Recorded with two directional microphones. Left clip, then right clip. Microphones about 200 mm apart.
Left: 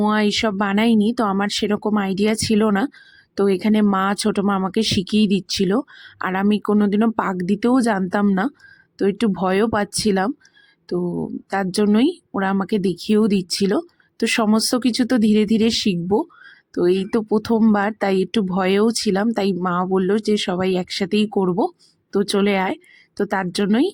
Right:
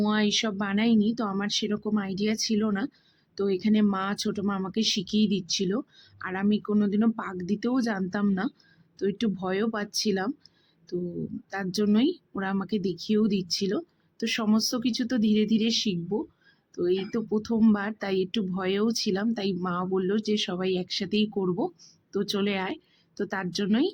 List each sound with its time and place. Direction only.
0.0 s speech: 35° left (ahead or behind)